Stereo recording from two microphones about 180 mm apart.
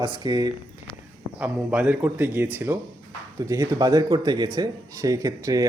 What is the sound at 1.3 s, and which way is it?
Speech, 5° right (ahead or behind).